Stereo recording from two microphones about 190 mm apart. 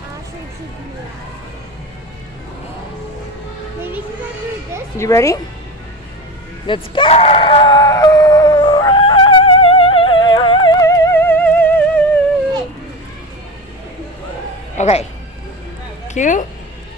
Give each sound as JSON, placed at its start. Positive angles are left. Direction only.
{"t": 4.9, "sound": "a woman's voice", "side_deg": 15}
{"t": 6.7, "sound": "screaming", "side_deg": 30}
{"t": 14.8, "sound": "speech", "side_deg": 35}
{"t": 16.1, "sound": "speech", "side_deg": 40}